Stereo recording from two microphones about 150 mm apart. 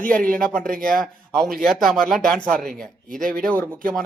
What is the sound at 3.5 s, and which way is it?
Speech, 10° left (ahead or behind).